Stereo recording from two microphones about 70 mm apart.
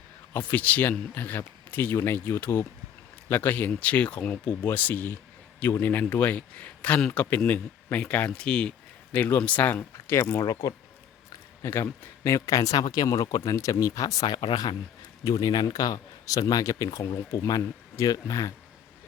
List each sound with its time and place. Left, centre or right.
0.3 s speech: left
8.3 s speech: centre
9.1 s speech: left
10.4 s a man's voice: left
11.6 s a man's voice: left
15.2 s a man's voice: left